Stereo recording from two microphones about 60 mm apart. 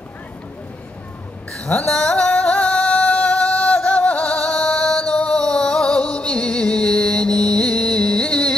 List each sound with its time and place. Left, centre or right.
1.5 s a woman's voice: centre
1.9 s music: centre